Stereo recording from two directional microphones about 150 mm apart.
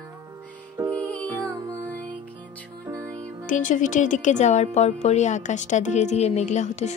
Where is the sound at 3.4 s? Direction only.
60° left (ahead or behind).